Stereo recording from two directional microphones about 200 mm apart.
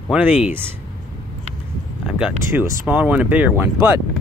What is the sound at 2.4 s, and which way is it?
Speech, 15° right (ahead or behind).